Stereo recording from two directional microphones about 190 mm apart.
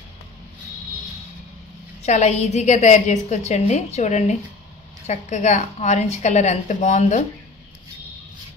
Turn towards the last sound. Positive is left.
turn(degrees=35)  # may be behind; listen again after turning